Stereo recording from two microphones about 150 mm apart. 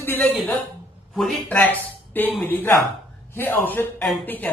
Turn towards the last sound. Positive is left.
turn(degrees=10)  # may be behind; listen again after turning